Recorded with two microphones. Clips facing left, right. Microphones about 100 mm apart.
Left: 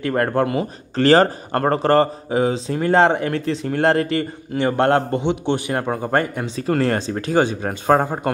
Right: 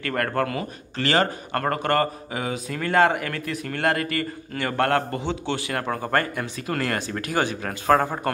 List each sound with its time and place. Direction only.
0.0 s speech: 25° left (ahead or behind)
0.9 s speech: 35° left (ahead or behind)